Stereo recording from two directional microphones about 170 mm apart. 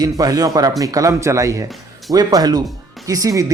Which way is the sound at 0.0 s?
20° right (ahead or behind).